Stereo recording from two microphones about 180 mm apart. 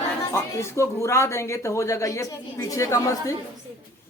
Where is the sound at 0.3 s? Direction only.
15° left (ahead or behind).